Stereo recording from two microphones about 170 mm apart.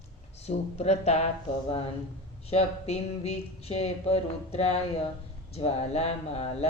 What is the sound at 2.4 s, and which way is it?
Speech, 40° left (ahead or behind).